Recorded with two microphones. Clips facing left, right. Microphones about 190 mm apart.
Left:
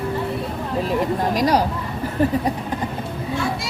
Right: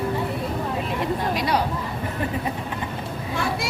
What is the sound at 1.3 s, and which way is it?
Speech, 40° left (ahead or behind).